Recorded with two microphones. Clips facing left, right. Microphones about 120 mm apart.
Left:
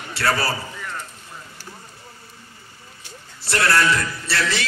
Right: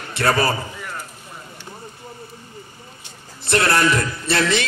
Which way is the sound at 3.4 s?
20° right (ahead or behind).